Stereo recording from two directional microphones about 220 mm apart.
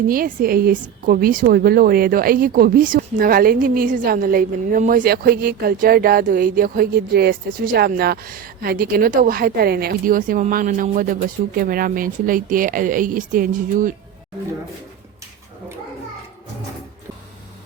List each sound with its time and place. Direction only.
0.1 s a woman's voice: 40° right (ahead or behind)